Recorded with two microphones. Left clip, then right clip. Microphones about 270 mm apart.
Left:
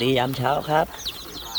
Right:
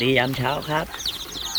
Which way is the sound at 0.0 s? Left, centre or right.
Centre.